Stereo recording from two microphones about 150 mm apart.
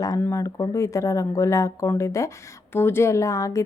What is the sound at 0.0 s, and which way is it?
A woman's voice, 20° left (ahead or behind).